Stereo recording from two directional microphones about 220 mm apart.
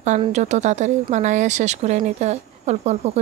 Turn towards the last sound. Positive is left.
turn(degrees=-30)  # may be behind; listen again after turning